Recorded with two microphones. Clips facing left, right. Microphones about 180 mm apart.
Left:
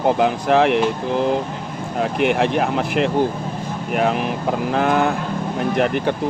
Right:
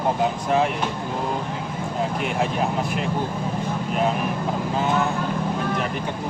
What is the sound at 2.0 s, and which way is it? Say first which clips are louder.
Speech: left 7 dB; 70° left (ahead or behind).